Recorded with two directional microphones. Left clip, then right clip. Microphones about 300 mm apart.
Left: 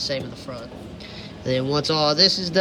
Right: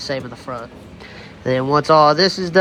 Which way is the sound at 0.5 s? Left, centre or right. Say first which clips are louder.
Right 7 dB; right.